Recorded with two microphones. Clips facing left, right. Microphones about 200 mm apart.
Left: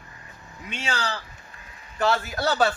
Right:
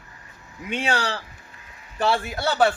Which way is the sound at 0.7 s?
60° right (ahead or behind).